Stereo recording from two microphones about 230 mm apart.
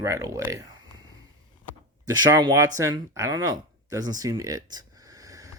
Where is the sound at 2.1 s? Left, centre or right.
Centre.